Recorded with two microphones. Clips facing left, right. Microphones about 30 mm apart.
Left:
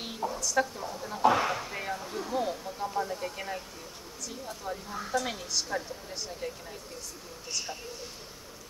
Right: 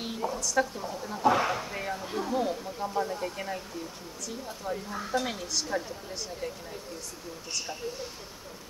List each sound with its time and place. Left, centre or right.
0.4 s speech: centre